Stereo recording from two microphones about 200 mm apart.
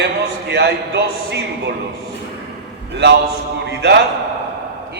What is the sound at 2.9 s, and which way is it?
Speech, 55° right (ahead or behind).